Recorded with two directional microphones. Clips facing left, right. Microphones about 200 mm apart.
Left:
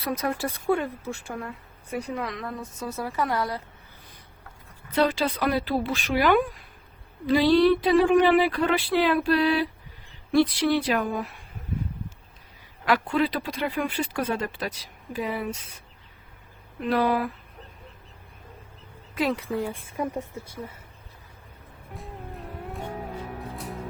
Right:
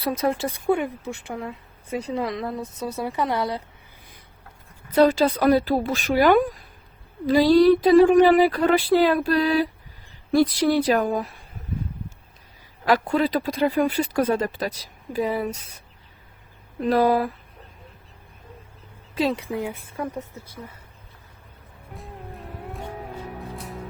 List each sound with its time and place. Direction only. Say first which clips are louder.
0.0 s speech: right 4 dB; 25° right (ahead or behind)
4.9 s speech: right 6 dB; 40° right (ahead or behind)
12.8 s speech: right 3 dB; 40° right (ahead or behind)
16.8 s speech: right 4 dB; 40° right (ahead or behind)
19.1 s speech: right 2 dB; 20° right (ahead or behind)
20.0 s a woman's voice: left 1 dB; 30° left (ahead or behind)
21.9 s music: even; centre (ahead or behind)